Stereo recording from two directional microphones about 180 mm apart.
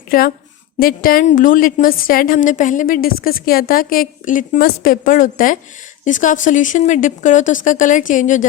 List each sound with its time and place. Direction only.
0.1 s a woman's voice: 50° left (ahead or behind)